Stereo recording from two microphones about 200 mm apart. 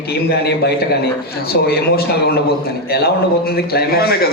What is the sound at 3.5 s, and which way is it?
Speech, 50° left (ahead or behind).